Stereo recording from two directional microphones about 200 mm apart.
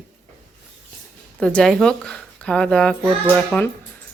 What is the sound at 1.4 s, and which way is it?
A child's voice, 5° left (ahead or behind).